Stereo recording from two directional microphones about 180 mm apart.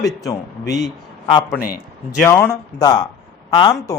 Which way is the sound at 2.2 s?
10° left (ahead or behind).